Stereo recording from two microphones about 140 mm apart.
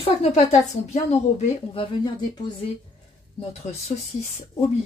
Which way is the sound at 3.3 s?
50° left (ahead or behind).